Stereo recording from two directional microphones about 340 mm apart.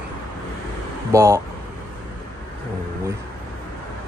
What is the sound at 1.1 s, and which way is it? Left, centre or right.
Speech, centre.